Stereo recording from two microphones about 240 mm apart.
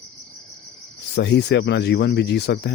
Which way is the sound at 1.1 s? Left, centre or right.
Left.